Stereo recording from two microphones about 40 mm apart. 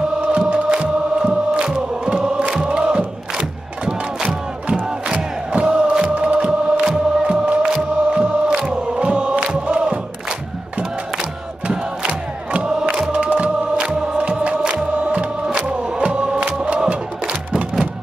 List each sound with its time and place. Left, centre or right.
0.3 s chant: right
2.5 s crowd: right
4.7 s chant: right
11.6 s crowd: right
12.9 s music: centre